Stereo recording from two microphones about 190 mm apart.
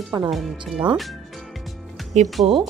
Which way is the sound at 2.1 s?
35° right (ahead or behind).